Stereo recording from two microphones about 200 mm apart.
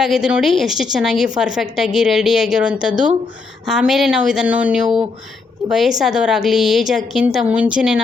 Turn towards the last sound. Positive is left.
turn(degrees=-5)  # may be behind; listen again after turning